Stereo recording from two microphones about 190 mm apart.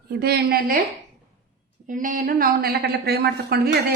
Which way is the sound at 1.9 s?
45° right (ahead or behind).